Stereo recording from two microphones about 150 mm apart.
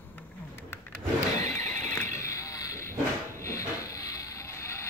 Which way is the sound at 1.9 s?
20° left (ahead or behind).